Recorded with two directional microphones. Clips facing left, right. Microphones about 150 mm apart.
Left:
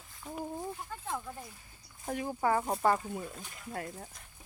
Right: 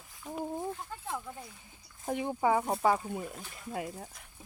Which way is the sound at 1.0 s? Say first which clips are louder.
Even; 10° right (ahead or behind).